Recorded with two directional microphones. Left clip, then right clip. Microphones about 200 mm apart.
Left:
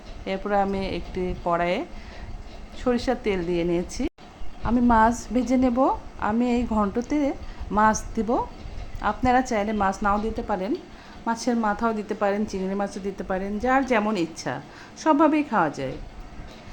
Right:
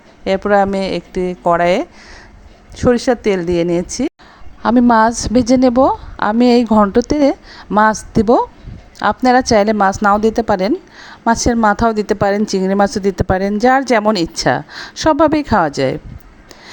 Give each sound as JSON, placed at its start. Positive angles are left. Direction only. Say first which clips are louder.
{"t": 0.3, "sound": "a woman's voice", "louder": "right 11 dB", "side_deg": -40}